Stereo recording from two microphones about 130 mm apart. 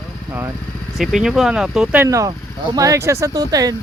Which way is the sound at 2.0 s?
25° right (ahead or behind).